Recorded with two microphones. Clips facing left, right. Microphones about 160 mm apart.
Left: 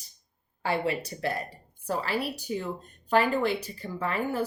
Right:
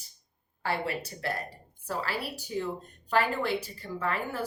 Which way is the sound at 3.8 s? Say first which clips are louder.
Left 2 dB; 20° left (ahead or behind).